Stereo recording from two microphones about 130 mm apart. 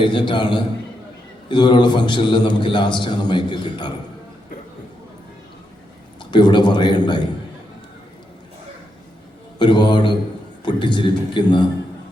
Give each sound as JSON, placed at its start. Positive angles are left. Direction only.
{"t": 0.0, "sound": "a man's voice", "side_deg": 40}
{"t": 6.1, "sound": "a man's voice", "side_deg": 35}
{"t": 9.6, "sound": "a man's voice", "side_deg": 35}